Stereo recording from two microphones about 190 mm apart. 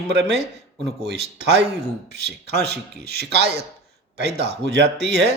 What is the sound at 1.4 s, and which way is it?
Speech, 60° right (ahead or behind).